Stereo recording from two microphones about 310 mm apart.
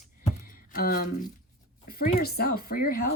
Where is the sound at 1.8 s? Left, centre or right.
Left.